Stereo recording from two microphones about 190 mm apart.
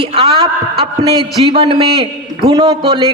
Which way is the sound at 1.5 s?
30° right (ahead or behind).